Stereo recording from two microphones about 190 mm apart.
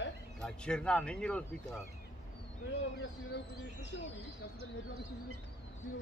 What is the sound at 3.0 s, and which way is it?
Speech, 65° left (ahead or behind).